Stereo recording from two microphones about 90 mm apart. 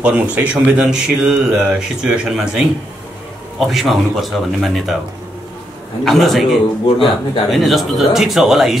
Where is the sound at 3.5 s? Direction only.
Centre (ahead or behind).